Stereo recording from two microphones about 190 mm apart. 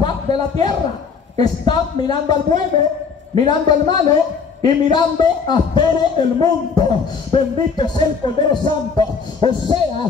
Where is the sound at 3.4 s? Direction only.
20° left (ahead or behind).